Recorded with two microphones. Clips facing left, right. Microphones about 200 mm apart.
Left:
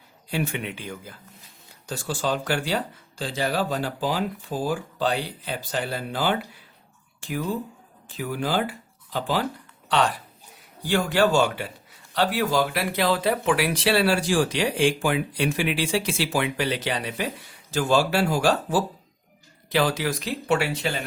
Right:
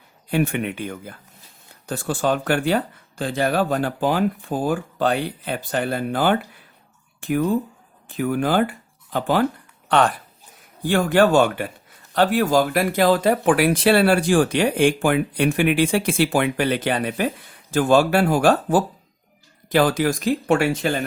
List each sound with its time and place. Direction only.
0.3 s a man's voice: 55° right (ahead or behind)